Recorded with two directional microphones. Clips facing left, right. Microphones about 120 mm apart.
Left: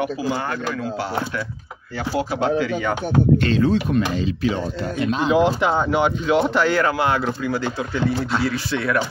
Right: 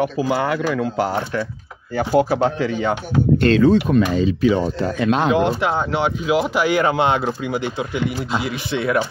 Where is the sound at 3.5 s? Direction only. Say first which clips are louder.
Right 4 dB; 60° right (ahead or behind).